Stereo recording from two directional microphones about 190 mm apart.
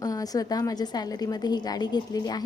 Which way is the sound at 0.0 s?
20° left (ahead or behind).